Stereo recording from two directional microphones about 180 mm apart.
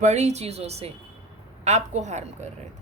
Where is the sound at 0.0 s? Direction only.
40° right (ahead or behind).